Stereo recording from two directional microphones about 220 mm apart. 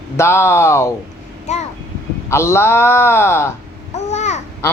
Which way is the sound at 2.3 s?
10° left (ahead or behind).